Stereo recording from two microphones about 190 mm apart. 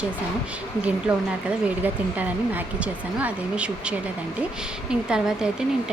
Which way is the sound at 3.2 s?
5° right (ahead or behind).